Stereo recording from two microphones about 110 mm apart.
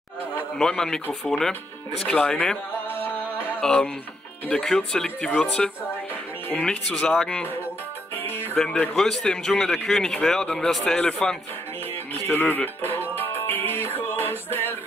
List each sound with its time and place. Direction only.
0.6 s speech: 5° left (ahead or behind)
2.9 s music: 20° left (ahead or behind)
3.6 s speech: 10° left (ahead or behind)
8.2 s music: 20° left (ahead or behind)
8.5 s speech: 10° left (ahead or behind)
12.3 s music: 15° left (ahead or behind)